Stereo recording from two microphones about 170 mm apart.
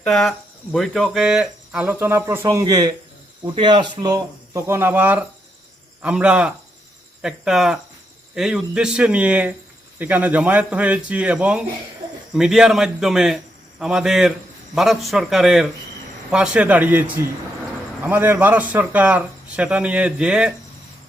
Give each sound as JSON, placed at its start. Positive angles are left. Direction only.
{"t": 0.1, "sound": "speech", "side_deg": 0}